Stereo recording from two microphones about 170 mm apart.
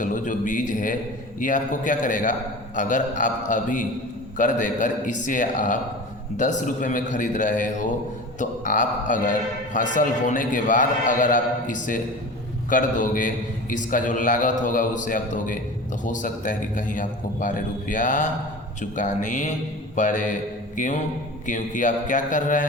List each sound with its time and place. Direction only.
0.0 s a man's voice: 50° left (ahead or behind)